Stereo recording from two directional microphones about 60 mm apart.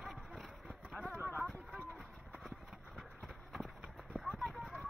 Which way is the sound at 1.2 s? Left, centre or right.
Right.